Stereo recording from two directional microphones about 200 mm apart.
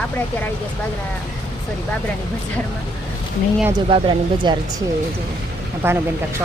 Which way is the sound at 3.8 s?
25° right (ahead or behind).